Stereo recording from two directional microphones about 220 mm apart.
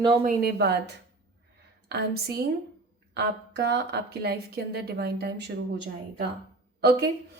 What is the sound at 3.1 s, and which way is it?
A woman's voice, 50° right (ahead or behind).